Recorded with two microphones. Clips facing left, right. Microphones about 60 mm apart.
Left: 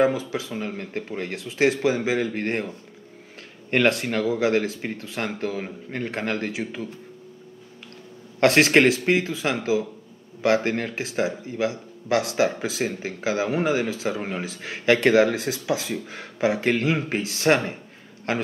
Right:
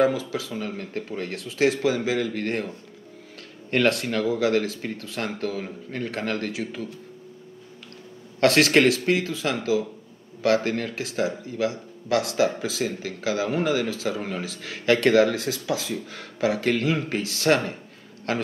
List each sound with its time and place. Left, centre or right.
0.0 s speech: left
3.7 s speech: left
8.4 s speech: left